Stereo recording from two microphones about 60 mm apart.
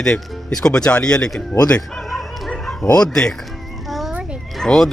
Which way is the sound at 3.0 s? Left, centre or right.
Centre.